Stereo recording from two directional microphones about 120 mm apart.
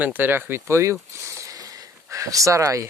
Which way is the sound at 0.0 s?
15° right (ahead or behind).